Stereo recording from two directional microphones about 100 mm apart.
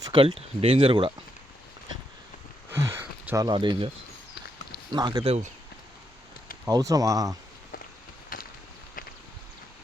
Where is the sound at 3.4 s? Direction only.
50° right (ahead or behind).